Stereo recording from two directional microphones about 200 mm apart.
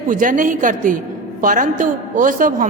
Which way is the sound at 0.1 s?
40° right (ahead or behind).